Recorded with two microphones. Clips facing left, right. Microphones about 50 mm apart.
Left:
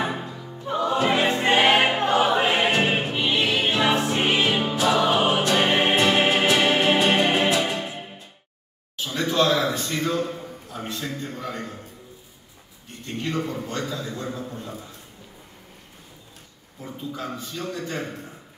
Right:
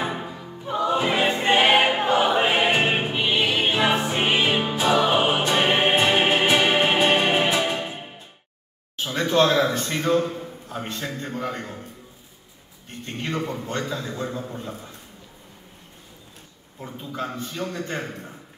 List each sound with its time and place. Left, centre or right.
0.0 s music: centre
0.5 s music: centre; by 8.0 s right
8.9 s a sound: right
10.7 s a man's voice: right
13.5 s a man's voice: right
16.8 s a man's voice: right